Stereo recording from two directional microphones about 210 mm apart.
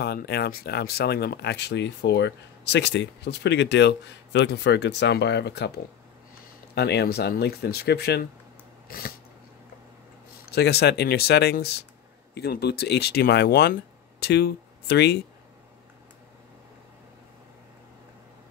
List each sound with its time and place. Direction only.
0.0 s speech: 50° left (ahead or behind)
6.7 s speech: 50° left (ahead or behind)
8.8 s a sound: 45° left (ahead or behind)
10.5 s speech: 50° left (ahead or behind)